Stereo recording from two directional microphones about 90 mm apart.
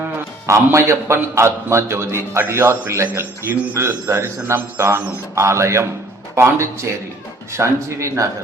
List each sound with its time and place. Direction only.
0.4 s a man's voice: 30° right (ahead or behind)